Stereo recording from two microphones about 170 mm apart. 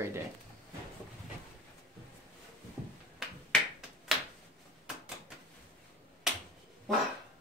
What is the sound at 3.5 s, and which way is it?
Finger snapping, 5° left (ahead or behind).